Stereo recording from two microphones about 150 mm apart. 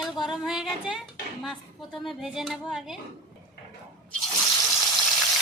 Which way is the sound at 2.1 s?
Centre (ahead or behind).